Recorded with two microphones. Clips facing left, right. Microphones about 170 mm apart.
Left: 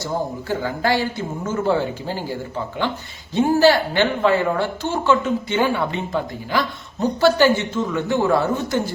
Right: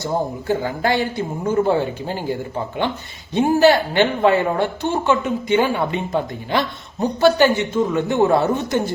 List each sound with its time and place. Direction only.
0.0 s a woman's voice: 20° right (ahead or behind)
3.3 s a man's voice: 20° right (ahead or behind)